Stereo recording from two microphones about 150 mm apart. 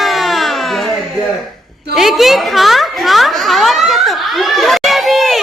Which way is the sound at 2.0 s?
Centre (ahead or behind).